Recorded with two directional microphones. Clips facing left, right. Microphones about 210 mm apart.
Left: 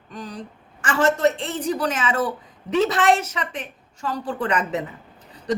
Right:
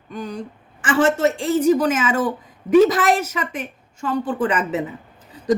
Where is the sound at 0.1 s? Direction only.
35° left (ahead or behind).